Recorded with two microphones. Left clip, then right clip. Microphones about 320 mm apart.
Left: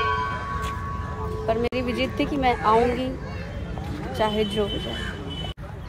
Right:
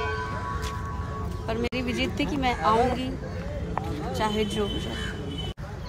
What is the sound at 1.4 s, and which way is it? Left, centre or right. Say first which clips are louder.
Speech: left 5 dB; centre.